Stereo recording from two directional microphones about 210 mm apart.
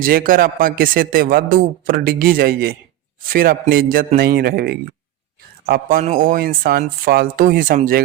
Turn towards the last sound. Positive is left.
turn(degrees=-40)  # may be behind; listen again after turning